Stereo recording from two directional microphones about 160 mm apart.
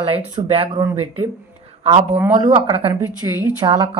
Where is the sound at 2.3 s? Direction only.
50° right (ahead or behind).